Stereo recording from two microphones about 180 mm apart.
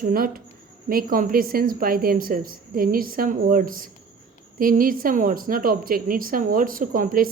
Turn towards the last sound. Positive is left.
turn(degrees=-50)  # may be behind; listen again after turning